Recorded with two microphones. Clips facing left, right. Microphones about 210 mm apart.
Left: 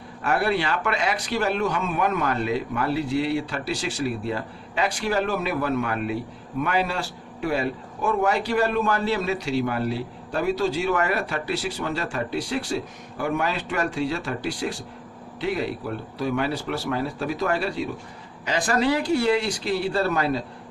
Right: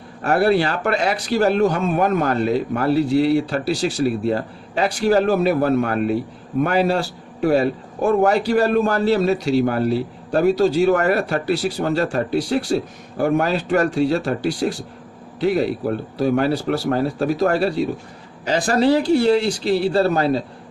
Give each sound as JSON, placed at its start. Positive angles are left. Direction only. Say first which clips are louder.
{"t": 0.2, "sound": "a man's voice", "louder": "right 7 dB", "side_deg": -40}